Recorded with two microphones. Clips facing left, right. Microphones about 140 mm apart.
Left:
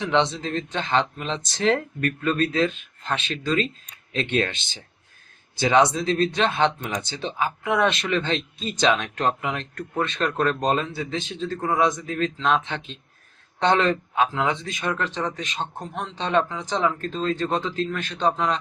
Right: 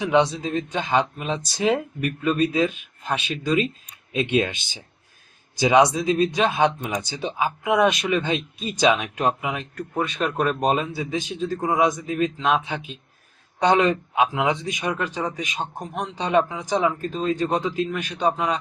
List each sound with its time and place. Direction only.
0.0 s speech: 10° right (ahead or behind)